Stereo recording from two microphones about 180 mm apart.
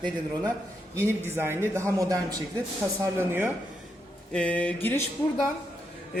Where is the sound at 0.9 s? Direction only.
15° right (ahead or behind).